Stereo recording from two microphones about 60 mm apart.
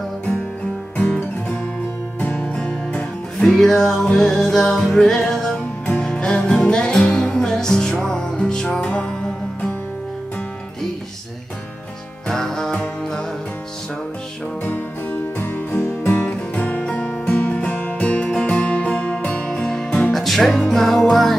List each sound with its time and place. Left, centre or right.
2.1 s music: left; by 8.8 s centre
8.8 s music: centre
12.3 s music: centre
14.6 s music: left
16.1 s music: left
16.8 s music: centre